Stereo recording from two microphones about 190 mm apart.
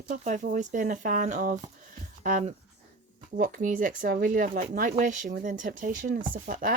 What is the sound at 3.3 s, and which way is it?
Speech, 45° right (ahead or behind).